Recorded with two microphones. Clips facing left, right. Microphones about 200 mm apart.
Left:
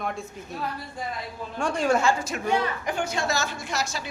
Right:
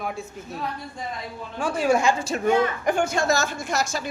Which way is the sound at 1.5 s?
5° right (ahead or behind).